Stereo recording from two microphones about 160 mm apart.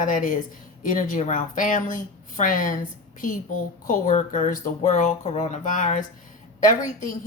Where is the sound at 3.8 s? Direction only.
50° left (ahead or behind).